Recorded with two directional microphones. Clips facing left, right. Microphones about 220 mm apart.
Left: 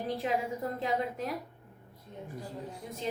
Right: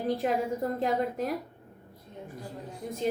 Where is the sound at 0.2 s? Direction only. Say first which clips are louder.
Right 2 dB; 50° right (ahead or behind).